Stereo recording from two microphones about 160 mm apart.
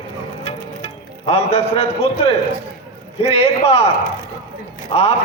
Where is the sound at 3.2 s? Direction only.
40° left (ahead or behind).